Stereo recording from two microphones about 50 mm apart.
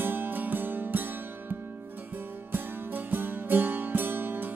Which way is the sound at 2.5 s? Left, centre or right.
Right.